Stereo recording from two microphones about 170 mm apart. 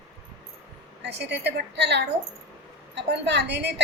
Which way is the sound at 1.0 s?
80° right.